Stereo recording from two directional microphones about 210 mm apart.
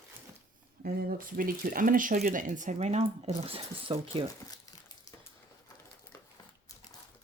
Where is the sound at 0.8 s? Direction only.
45° right (ahead or behind); by 4.2 s 25° right (ahead or behind).